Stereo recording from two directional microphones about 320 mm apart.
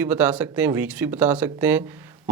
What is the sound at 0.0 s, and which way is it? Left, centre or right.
Speech, centre.